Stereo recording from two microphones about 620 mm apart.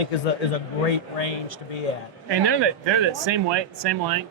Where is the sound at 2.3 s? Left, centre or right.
Right.